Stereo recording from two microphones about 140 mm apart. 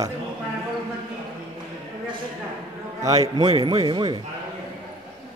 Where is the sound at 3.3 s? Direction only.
30° right (ahead or behind).